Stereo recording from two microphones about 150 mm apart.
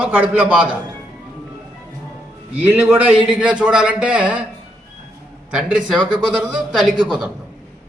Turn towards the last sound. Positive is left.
turn(degrees=0)  # may be behind; listen again after turning